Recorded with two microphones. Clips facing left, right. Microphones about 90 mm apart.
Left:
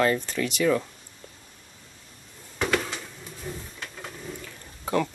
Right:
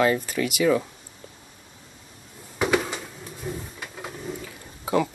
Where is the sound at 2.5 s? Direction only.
10° right (ahead or behind).